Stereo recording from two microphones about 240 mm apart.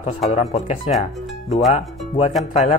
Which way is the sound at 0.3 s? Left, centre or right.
Left.